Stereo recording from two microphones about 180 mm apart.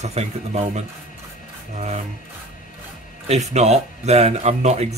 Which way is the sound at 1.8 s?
40° right (ahead or behind).